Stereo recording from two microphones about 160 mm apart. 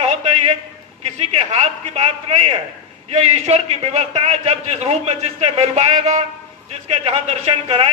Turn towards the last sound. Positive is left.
turn(degrees=-35)  # may be behind; listen again after turning